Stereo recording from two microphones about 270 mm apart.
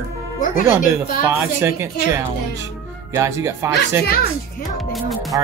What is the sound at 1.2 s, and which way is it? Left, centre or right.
Speech, centre.